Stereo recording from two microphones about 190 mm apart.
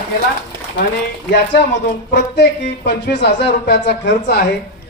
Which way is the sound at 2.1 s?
60° left (ahead or behind).